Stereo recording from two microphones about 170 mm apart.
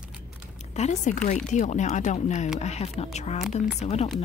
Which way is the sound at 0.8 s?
40° left (ahead or behind).